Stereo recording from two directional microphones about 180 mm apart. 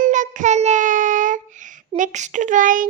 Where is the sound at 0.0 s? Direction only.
45° right (ahead or behind).